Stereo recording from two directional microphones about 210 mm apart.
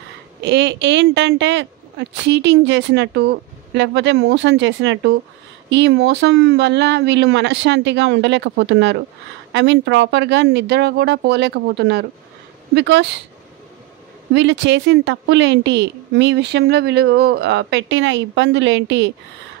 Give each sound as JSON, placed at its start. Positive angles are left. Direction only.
{"t": 0.4, "sound": "a woman's voice", "side_deg": -55}
{"t": 14.3, "sound": "a woman's voice", "side_deg": -60}